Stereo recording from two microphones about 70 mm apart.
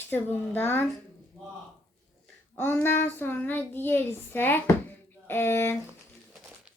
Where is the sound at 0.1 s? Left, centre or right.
Left.